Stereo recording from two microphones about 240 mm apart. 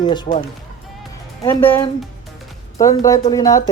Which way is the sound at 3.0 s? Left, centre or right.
Centre.